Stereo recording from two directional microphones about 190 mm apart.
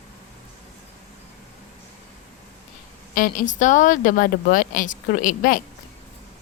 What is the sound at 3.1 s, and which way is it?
Speech, 45° left (ahead or behind).